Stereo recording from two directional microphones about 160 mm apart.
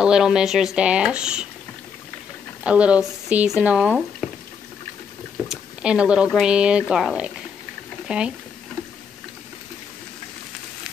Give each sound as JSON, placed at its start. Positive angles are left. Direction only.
{"t": 0.0, "sound": "speech", "side_deg": -5}
{"t": 2.6, "sound": "speech", "side_deg": -5}
{"t": 5.5, "sound": "speech", "side_deg": -5}